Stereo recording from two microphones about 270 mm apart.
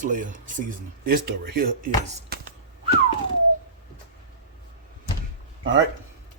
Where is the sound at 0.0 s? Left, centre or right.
Right.